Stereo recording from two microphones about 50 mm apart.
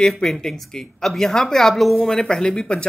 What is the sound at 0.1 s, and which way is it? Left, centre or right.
A woman's voice, centre.